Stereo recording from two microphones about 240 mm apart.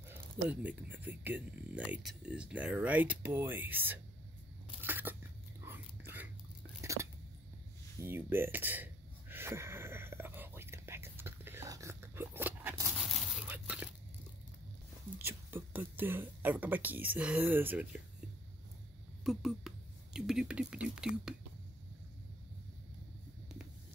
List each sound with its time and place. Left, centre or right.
0.1 s speech: centre
4.8 s a sound: centre
5.7 s dog: centre
6.8 s a sound: centre
13.0 s whispering: centre
15.1 s speech: centre
19.2 s speech: centre